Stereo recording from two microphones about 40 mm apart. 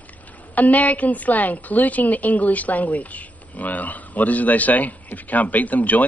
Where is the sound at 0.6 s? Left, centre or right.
Left.